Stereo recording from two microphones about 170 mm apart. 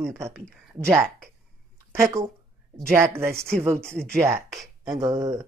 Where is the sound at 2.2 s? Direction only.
15° right (ahead or behind).